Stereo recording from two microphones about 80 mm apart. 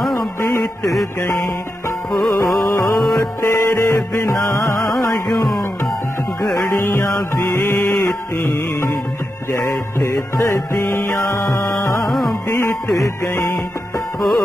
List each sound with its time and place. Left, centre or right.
0.0 s music: centre
2.1 s music: centre
3.4 s music: left
4.8 s music: centre
6.7 s music: left
9.9 s music: left
12.0 s music: centre
13.5 s music: centre